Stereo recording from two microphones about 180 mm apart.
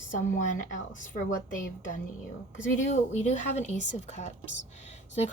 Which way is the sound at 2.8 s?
40° left (ahead or behind).